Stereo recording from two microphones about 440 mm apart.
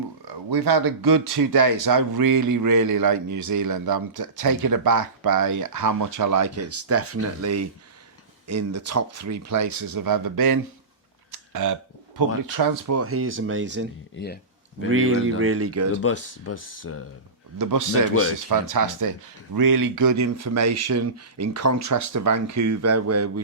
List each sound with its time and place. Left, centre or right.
0.3 s speech: right
11.3 s a sound: right
12.9 s speech: right
14.8 s speech: right
16.0 s speech: left
17.6 s speech: right
18.1 s speech: left
18.3 s speech: right